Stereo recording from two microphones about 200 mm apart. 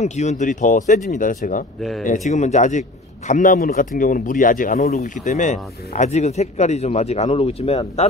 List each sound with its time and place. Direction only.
0.0 s a man's voice: 35° left (ahead or behind)